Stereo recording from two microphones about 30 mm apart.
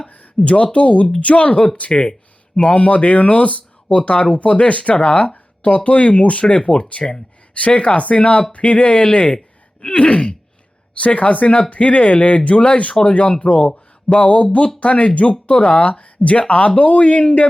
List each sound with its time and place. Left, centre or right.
0.4 s speech: left
1.9 s speech: left
2.6 s speech: left
6.4 s speech: left
12.9 s speech: left
13.1 s speech: left